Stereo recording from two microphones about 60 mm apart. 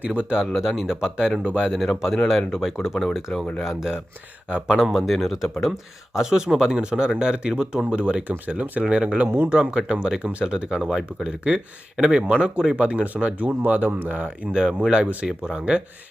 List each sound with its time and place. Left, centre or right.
0.0 s speech: right
0.5 s speech: centre
4.4 s speech: centre
4.8 s speech: centre
13.5 s speech: right
14.5 s speech: centre